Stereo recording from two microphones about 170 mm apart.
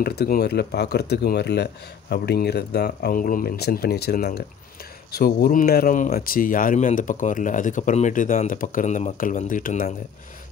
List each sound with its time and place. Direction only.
0.0 s speech: 65° left (ahead or behind); by 9.9 s 50° left (ahead or behind)